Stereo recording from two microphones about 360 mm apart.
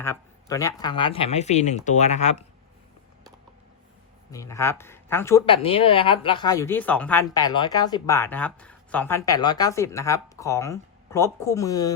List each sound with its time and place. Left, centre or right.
0.0 s speech: centre
4.3 s speech: centre